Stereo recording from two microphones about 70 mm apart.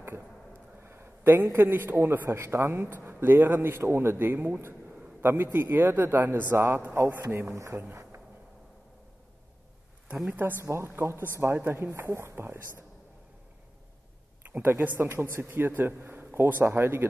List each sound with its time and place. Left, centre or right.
0.8 s a sound: right
1.5 s speech: right
7.9 s a sound: right
10.3 s speech: right
11.9 s speech: right
14.5 s speech: right